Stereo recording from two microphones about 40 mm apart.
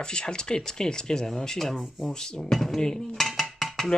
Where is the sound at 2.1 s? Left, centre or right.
Centre.